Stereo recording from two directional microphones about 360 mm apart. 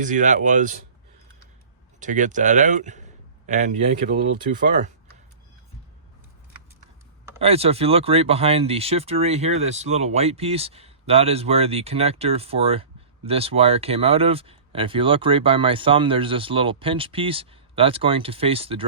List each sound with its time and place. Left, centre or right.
0.0 s speech: right
2.0 s speech: right
7.3 s speech: centre